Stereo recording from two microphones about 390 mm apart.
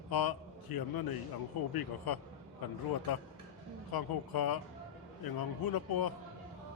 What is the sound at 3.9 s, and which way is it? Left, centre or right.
A man's voice, left.